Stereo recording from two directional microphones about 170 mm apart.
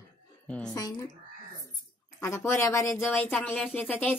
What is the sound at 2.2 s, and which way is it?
Speech, 15° left (ahead or behind).